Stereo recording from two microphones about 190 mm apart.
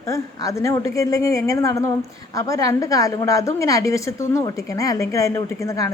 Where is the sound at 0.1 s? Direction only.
15° left (ahead or behind).